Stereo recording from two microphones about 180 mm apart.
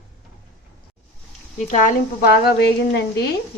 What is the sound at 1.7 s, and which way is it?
A woman's voice, 50° left (ahead or behind).